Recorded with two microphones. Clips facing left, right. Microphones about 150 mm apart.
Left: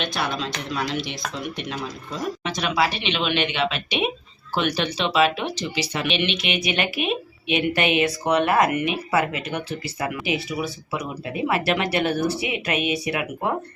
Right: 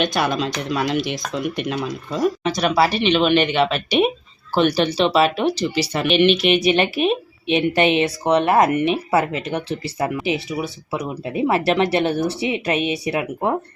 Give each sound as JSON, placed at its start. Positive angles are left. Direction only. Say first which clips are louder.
{"t": 0.0, "sound": "speech", "louder": "right 6 dB", "side_deg": -50}
{"t": 2.4, "sound": "speech", "louder": "right 2 dB", "side_deg": -40}
{"t": 4.5, "sound": "speech", "louder": "right 7 dB", "side_deg": -35}